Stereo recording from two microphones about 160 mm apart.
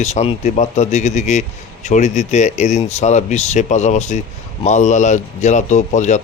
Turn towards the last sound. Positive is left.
turn(degrees=45)  # may be behind; listen again after turning